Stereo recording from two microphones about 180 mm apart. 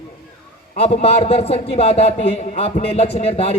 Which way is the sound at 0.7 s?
35° left (ahead or behind).